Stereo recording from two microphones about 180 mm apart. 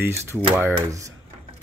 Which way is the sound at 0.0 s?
15° right (ahead or behind).